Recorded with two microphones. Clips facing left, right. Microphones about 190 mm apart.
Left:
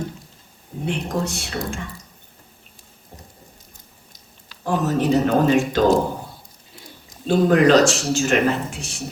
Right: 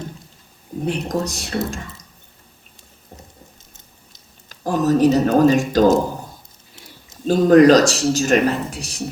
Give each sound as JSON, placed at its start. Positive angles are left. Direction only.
{"t": 0.9, "sound": "speech", "side_deg": -40}
{"t": 4.4, "sound": "speech", "side_deg": -40}
{"t": 7.3, "sound": "speech", "side_deg": -40}